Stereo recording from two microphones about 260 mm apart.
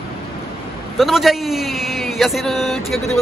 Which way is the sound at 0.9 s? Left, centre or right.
Centre.